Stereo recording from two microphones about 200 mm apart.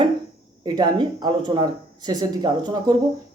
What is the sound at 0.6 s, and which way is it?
Speech, 20° right (ahead or behind).